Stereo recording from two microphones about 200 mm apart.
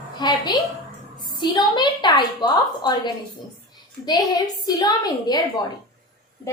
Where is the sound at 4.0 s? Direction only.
20° left (ahead or behind).